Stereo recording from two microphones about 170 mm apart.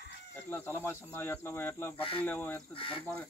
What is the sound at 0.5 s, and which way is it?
Speech, 15° left (ahead or behind).